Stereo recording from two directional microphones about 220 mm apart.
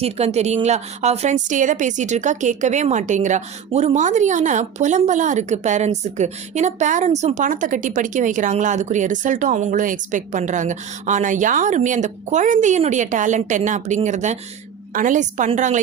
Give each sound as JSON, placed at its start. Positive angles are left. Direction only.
{"t": 0.0, "sound": "a woman's voice", "side_deg": -30}